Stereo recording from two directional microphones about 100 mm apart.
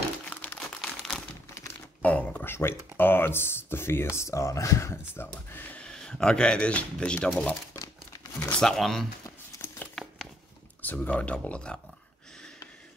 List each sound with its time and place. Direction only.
0.3 s crumpling: 10° left (ahead or behind)
0.7 s crumpling: centre (ahead or behind)
1.5 s crumpling: 30° left (ahead or behind)
2.0 s a sound: 15° left (ahead or behind)
2.5 s speech: 25° left (ahead or behind)
8.5 s speech: 5° left (ahead or behind)
10.0 s a sound: centre (ahead or behind)
10.8 s speech: 15° left (ahead or behind)